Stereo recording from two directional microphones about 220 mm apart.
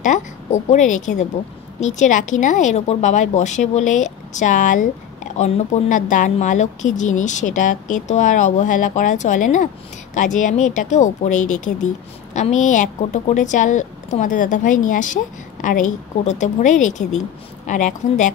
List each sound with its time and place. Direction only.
0.0 s a woman's voice: 30° left (ahead or behind)